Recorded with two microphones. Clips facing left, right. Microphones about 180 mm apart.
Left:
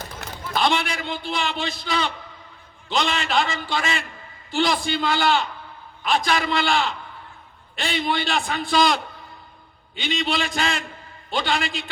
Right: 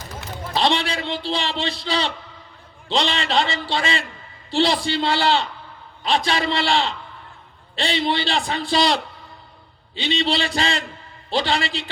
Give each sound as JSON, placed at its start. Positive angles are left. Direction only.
{"t": 0.5, "sound": "a man's voice", "side_deg": -30}